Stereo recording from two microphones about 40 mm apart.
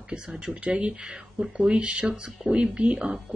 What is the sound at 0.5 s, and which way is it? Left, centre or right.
Speech, right.